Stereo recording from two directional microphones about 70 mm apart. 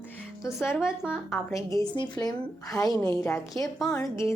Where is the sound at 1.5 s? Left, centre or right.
Left.